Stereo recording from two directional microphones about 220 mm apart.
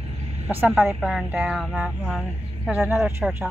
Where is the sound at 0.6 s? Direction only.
Centre (ahead or behind).